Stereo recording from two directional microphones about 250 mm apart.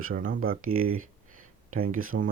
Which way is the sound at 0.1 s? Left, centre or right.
Right.